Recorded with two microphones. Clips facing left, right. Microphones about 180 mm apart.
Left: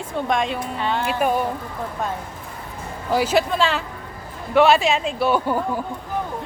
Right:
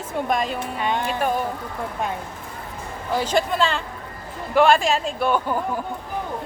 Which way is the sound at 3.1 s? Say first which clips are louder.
Left 2 dB; 5° left (ahead or behind).